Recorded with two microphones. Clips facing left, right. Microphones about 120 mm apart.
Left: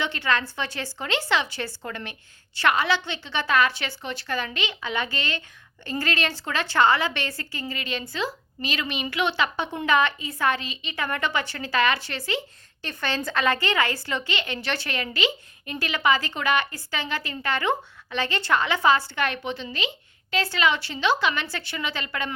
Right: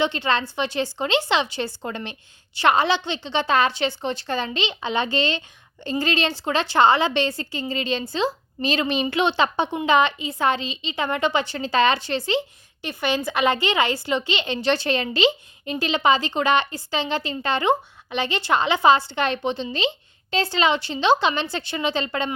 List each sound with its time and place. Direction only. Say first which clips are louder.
0.0 s a woman's voice: right 4 dB; 20° right (ahead or behind)